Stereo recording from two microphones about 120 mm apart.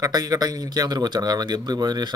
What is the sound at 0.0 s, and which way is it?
Speech, 30° right (ahead or behind).